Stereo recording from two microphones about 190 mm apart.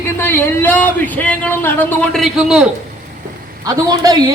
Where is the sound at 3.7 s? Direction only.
20° right (ahead or behind).